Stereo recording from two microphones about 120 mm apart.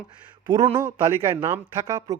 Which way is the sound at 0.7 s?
20° right (ahead or behind).